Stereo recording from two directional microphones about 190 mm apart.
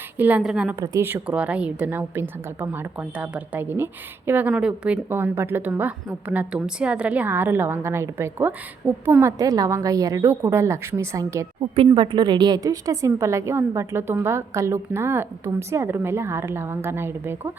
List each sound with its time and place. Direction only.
0.2 s a woman's voice: 10° right (ahead or behind)
11.7 s a woman's voice: 30° right (ahead or behind); by 17.5 s 10° right (ahead or behind)